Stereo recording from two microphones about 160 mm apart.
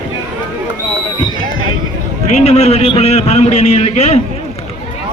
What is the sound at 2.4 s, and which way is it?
A man's voice, 45° left (ahead or behind).